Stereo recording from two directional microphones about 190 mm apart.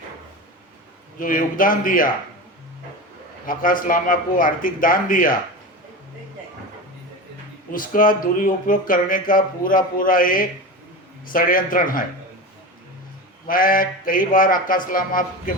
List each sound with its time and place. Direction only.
1.2 s speech: 45° left (ahead or behind)
3.4 s speech: 45° left (ahead or behind)
7.7 s speech: 45° left (ahead or behind)
13.5 s speech: 50° left (ahead or behind)